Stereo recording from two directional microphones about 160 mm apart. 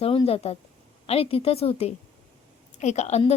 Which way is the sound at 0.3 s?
40° left (ahead or behind).